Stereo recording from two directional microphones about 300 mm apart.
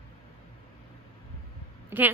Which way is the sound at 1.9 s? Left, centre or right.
Centre.